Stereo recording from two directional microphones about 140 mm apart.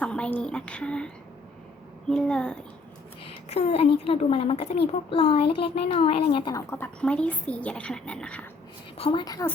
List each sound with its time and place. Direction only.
0.0 s a woman's voice: 10° left (ahead or behind)
3.5 s a child's voice: 45° left (ahead or behind); by 8.4 s 10° left (ahead or behind)
9.0 s a woman's voice: 35° left (ahead or behind)